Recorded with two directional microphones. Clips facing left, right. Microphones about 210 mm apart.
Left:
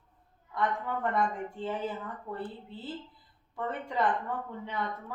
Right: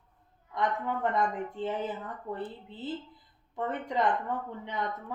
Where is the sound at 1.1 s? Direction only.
20° right (ahead or behind).